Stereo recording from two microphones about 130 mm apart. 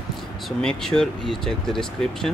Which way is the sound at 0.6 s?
5° left (ahead or behind).